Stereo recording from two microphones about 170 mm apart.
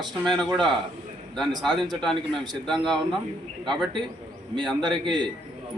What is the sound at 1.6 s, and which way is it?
Speech, centre (ahead or behind).